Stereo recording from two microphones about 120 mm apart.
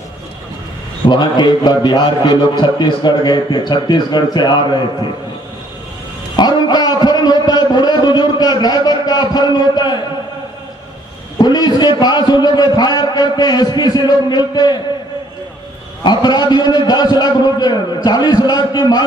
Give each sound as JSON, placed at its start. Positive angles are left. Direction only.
{"t": 1.0, "sound": "a man's voice", "side_deg": 40}
{"t": 6.3, "sound": "a sound", "side_deg": 35}
{"t": 11.3, "sound": "a man's voice", "side_deg": 35}
{"t": 16.0, "sound": "a man's voice", "side_deg": 35}